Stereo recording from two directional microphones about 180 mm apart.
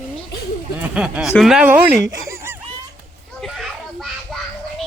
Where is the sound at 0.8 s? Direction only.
5° right (ahead or behind).